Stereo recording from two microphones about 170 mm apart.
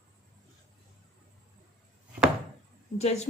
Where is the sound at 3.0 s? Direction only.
40° left (ahead or behind).